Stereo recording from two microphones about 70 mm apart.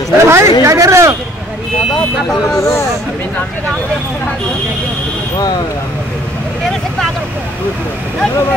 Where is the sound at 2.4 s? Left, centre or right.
Left.